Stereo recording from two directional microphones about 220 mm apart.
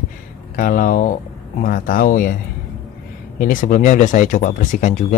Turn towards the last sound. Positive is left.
turn(degrees=35)  # may be behind; listen again after turning